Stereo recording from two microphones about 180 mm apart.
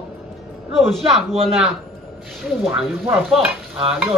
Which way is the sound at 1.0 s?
30° right (ahead or behind).